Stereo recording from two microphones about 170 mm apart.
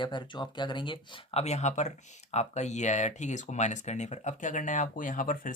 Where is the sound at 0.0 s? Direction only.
25° left (ahead or behind).